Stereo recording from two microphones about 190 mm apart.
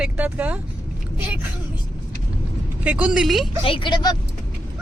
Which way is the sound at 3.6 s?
25° left (ahead or behind).